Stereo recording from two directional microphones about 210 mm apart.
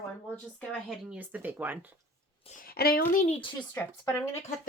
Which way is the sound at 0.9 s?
5° right (ahead or behind).